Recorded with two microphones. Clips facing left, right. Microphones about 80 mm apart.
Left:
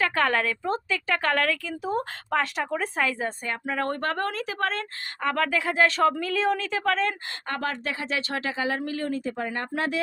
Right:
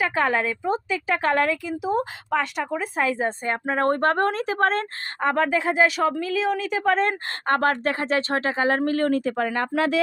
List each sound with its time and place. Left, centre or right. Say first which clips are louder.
0.0 s a woman's voice: right 2 dB; centre
3.2 s speech: right 5 dB; right; by 6.7 s centre
6.7 s a woman's voice: right 4 dB; centre
6.9 s speech: right 4 dB; right